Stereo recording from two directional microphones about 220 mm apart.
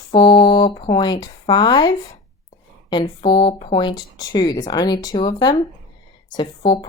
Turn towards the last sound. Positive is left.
turn(degrees=20)  # may be behind; listen again after turning